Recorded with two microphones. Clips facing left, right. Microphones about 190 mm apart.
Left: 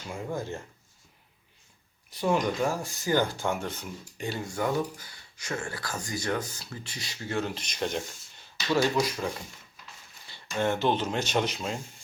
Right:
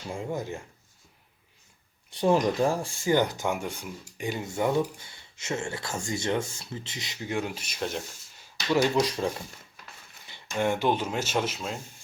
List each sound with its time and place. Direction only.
0.1 s speech: 20° right (ahead or behind)
2.0 s speech: 30° right (ahead or behind); by 8.0 s centre (ahead or behind)
8.7 s speech: 20° right (ahead or behind)
9.0 s speech: 30° right (ahead or behind)
10.2 s speech: 15° right (ahead or behind)